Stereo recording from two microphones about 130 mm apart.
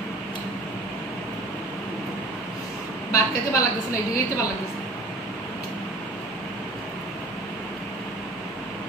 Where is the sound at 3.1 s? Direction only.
25° left (ahead or behind).